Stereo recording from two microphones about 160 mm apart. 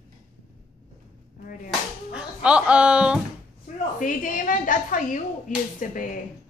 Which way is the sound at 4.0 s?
55° left (ahead or behind).